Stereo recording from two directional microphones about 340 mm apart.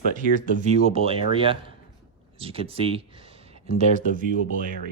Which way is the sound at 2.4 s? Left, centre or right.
Centre.